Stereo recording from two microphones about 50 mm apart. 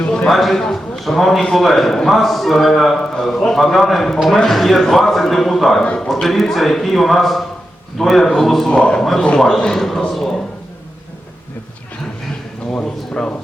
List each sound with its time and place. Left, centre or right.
0.3 s a man's voice: centre
8.7 s a man's voice: left
9.0 s a man's voice: centre
12.7 s speech: centre